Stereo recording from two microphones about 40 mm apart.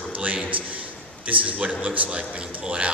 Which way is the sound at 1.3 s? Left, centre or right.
Right.